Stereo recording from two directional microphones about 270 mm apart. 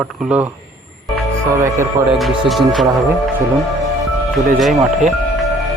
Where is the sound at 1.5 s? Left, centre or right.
Centre.